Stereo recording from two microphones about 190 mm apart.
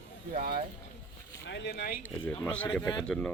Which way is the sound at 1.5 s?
65° left (ahead or behind).